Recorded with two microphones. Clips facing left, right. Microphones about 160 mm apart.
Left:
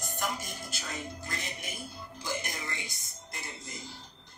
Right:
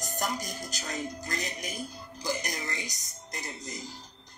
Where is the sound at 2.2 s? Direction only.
40° right (ahead or behind).